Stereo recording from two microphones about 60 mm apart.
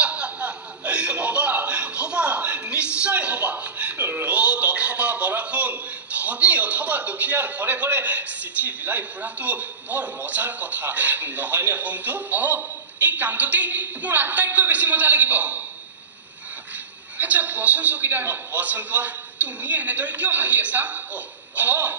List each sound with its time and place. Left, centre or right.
0.0 s chuckle: right
17.2 s a man's voice: right